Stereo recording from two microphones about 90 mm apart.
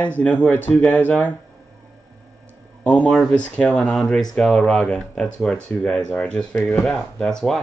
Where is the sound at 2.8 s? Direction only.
15° left (ahead or behind).